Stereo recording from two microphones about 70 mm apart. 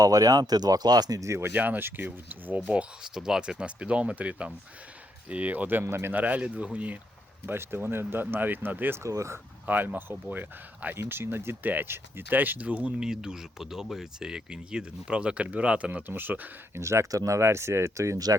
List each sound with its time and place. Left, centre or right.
0.0 s speech: right
1.2 s speech: right
2.6 s speech: centre
5.8 s speech: right
6.1 s speech: right
7.4 s speech: right
9.0 s speech: right
9.6 s speech: right
16.7 s speech: right